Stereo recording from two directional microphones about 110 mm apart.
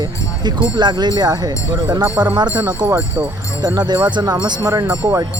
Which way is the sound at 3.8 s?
40° right (ahead or behind).